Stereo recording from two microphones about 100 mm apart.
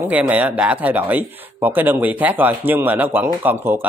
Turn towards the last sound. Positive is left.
turn(degrees=-20)  # may be behind; listen again after turning